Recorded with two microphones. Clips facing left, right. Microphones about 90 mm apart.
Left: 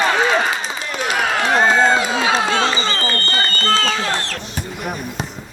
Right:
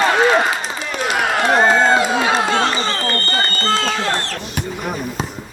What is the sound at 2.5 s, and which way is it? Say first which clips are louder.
Speech: right 1 dB; 90° left.